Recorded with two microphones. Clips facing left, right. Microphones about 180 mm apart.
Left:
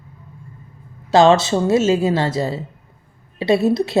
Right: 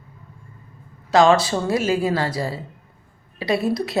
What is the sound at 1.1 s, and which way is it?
Speech, 25° left (ahead or behind).